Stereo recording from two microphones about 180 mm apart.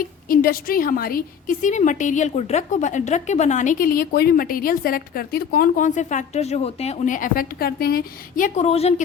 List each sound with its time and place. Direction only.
0.0 s a woman's voice: 55° left (ahead or behind); by 9.0 s 35° left (ahead or behind)